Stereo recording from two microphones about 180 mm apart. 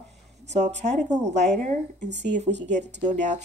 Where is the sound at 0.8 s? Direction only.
40° right (ahead or behind).